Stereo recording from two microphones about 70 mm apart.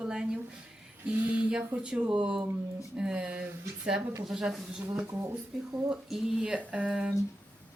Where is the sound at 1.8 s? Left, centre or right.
Centre.